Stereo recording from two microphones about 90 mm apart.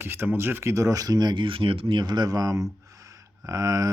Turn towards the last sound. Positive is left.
turn(degrees=-40)  # may be behind; listen again after turning